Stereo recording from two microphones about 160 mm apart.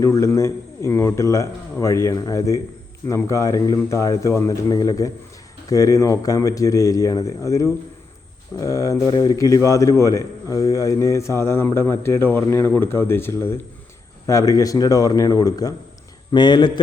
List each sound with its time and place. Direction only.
0.0 s speech: 20° left (ahead or behind)